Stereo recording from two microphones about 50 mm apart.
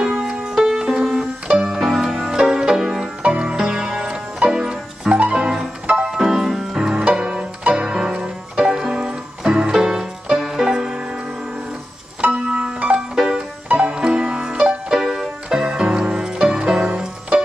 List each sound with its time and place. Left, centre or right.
0.1 s music: centre
3.2 s music: right
3.5 s music: centre
12.4 s music: centre